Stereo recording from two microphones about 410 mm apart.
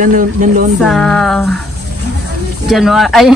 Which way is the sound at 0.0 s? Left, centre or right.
Centre.